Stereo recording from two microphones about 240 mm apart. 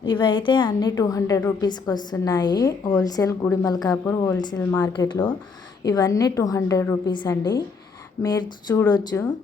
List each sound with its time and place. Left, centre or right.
0.0 s a woman's voice: centre